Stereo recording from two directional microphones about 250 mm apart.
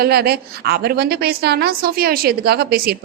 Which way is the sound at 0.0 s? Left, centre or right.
Right.